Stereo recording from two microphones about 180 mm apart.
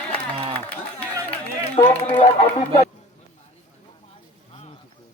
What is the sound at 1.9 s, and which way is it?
Speech, 35° left (ahead or behind).